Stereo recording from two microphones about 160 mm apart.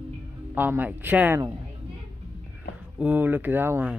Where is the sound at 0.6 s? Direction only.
10° right (ahead or behind).